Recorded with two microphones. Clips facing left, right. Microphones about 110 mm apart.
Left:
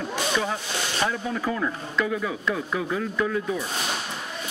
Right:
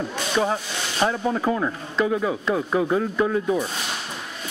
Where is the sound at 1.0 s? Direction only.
30° right (ahead or behind).